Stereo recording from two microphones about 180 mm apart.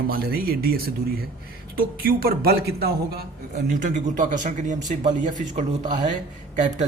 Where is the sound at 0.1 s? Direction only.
55° right (ahead or behind).